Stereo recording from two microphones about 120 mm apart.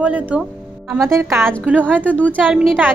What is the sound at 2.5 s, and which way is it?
Speech, centre (ahead or behind).